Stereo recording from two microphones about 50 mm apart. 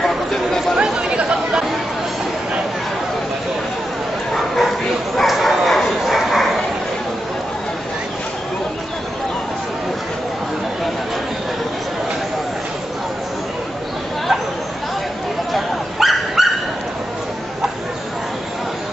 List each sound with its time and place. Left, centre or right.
0.0 s chatter: centre
0.7 s chatter: centre
5.1 s bow-wow: centre
15.5 s dog: centre